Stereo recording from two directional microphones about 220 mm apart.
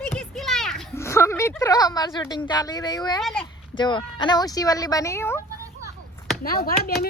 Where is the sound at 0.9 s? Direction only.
10° left (ahead or behind).